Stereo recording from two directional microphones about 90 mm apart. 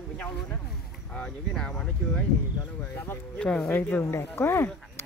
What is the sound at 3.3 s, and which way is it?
Speech, 10° left (ahead or behind).